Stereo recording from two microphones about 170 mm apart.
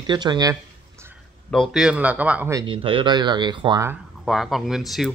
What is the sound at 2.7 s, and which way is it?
Speech, 30° right (ahead or behind).